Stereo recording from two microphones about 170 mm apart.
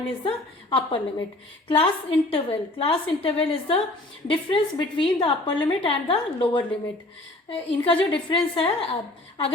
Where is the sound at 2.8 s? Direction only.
35° left (ahead or behind).